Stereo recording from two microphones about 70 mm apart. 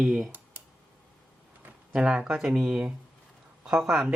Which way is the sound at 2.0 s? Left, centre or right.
Centre.